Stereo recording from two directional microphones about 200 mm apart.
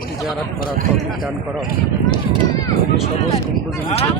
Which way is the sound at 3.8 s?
30° left (ahead or behind).